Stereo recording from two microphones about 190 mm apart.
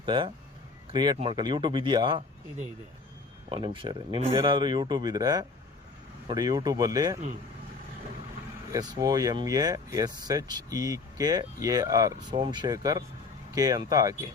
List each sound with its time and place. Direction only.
0.0 s speech: 25° right (ahead or behind)
3.5 s speech: 25° right (ahead or behind)
8.7 s speech: 20° right (ahead or behind)